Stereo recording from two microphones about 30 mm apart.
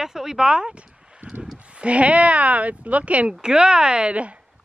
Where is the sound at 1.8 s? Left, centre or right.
Right.